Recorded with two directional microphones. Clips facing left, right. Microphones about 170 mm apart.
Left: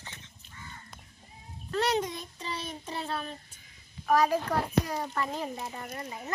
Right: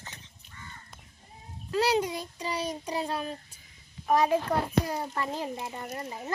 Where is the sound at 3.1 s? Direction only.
10° right (ahead or behind).